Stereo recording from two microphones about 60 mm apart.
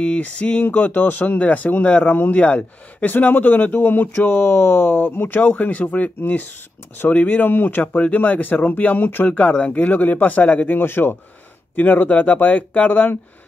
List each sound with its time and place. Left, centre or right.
0.0 s speech: centre
10.8 s speech: left